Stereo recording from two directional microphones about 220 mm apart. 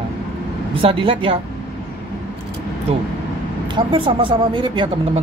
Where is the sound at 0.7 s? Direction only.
25° right (ahead or behind).